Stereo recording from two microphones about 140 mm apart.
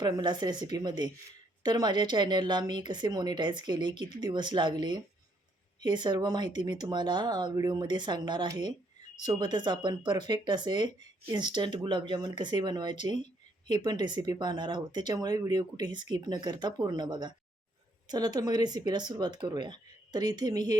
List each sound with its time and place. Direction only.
0.0 s a woman's voice: 30° right (ahead or behind)